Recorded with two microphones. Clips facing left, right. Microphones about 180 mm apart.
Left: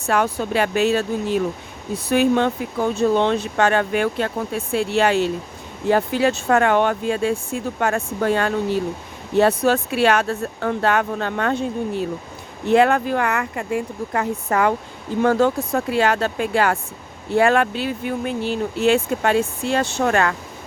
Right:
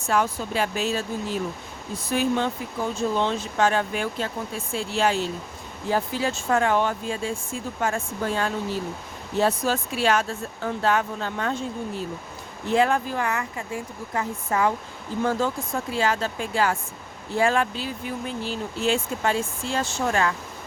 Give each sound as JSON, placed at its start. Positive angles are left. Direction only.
{"t": 0.0, "sound": "speech", "side_deg": 65}